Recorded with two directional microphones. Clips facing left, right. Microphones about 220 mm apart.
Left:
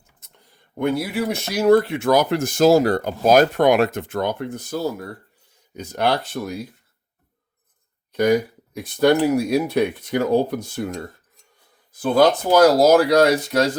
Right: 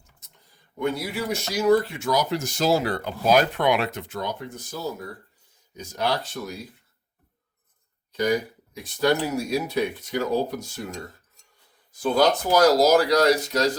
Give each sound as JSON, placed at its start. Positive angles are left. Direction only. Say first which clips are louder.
{"t": 0.8, "sound": "speech", "louder": "left 5 dB", "side_deg": 55}
{"t": 8.1, "sound": "speech", "louder": "left 6 dB", "side_deg": 60}
{"t": 12.5, "sound": "speech", "louder": "left 4 dB", "side_deg": 50}